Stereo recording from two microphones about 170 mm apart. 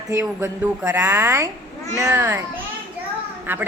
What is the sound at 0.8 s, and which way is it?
Speech, 10° right (ahead or behind).